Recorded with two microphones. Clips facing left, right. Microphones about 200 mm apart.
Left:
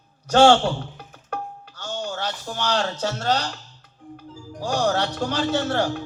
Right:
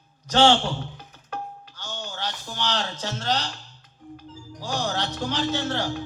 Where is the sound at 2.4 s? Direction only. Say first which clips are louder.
Left 5 dB; 45° left (ahead or behind).